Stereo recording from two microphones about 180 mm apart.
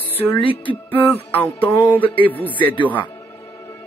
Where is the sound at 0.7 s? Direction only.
10° left (ahead or behind).